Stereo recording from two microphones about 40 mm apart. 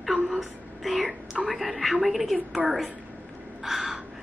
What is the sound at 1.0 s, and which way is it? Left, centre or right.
Whispering, centre.